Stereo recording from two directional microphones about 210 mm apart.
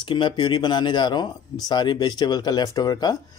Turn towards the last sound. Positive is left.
turn(degrees=20)  # may be behind; listen again after turning